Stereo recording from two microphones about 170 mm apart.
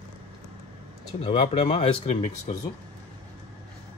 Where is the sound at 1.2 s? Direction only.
30° left (ahead or behind).